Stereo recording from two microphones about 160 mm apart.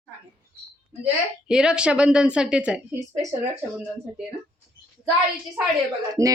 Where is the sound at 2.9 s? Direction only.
20° right (ahead or behind).